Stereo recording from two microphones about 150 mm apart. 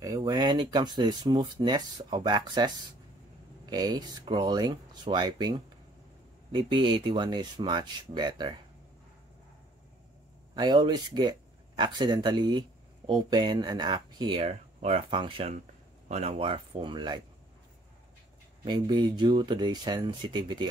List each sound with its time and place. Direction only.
0.0 s speech: 25° right (ahead or behind)
3.7 s speech: 25° right (ahead or behind)
10.5 s speech: 30° right (ahead or behind)
18.6 s speech: 30° right (ahead or behind)